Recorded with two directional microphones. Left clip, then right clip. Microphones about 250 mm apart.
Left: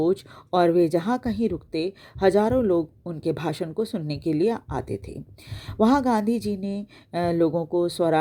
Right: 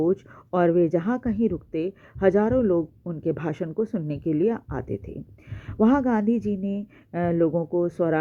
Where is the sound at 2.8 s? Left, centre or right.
Left.